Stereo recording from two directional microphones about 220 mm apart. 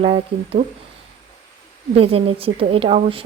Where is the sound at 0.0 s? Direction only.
25° right (ahead or behind).